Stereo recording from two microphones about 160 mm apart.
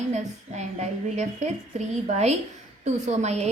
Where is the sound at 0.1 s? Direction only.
45° right (ahead or behind).